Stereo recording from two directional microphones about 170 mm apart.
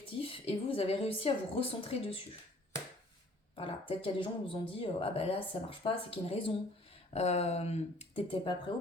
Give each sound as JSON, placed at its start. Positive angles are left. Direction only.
{"t": 0.2, "sound": "speech", "side_deg": 35}
{"t": 3.5, "sound": "speech", "side_deg": 30}